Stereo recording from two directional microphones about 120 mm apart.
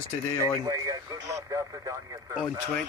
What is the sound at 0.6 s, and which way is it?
Speech, 30° right (ahead or behind).